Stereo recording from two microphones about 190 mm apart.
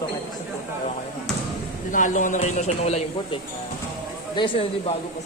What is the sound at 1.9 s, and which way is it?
A man's voice, 40° left (ahead or behind).